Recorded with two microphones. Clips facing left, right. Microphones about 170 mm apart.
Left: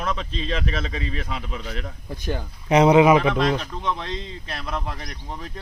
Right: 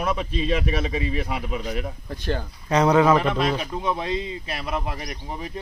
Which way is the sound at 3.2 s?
5° right (ahead or behind).